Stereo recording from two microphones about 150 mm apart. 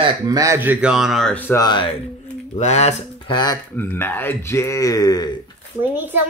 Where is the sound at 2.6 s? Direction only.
50° left (ahead or behind).